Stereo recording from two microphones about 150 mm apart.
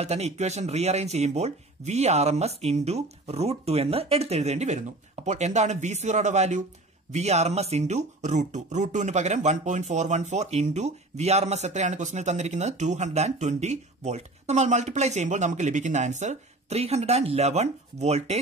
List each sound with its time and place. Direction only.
0.0 s speech: 45° right (ahead or behind)